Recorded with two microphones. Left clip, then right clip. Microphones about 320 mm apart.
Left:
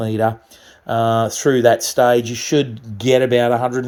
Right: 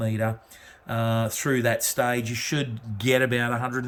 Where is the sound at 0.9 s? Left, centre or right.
Centre.